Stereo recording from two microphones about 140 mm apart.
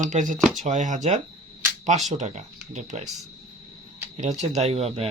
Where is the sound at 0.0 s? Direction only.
65° right (ahead or behind).